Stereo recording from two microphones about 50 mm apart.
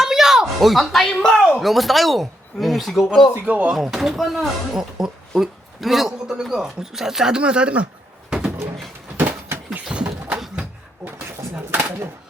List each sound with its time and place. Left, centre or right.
0.0 s a sound: centre
1.0 s speech: centre
1.4 s speech: centre
3.3 s speech: right
3.9 s a man's voice: centre
6.2 s speech: centre
8.3 s door: centre
9.1 s a sound: right
9.9 s a sound: right